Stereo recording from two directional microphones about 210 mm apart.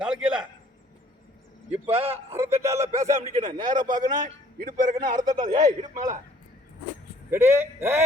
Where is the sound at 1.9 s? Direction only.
30° right (ahead or behind).